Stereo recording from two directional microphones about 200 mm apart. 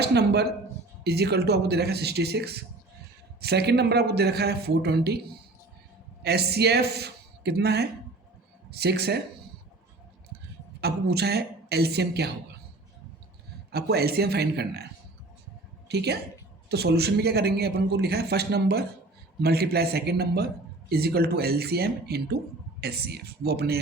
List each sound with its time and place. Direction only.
0.0 s speech: 55° right (ahead or behind)
6.2 s speech: 55° right (ahead or behind)
10.8 s speech: 55° right (ahead or behind)
13.7 s speech: 55° right (ahead or behind)
15.9 s speech: 55° right (ahead or behind)